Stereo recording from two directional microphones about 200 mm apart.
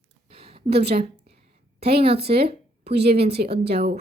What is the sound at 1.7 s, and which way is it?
A woman's voice, 55° right (ahead or behind).